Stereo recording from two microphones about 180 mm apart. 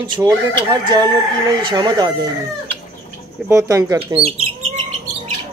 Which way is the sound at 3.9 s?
30° right (ahead or behind).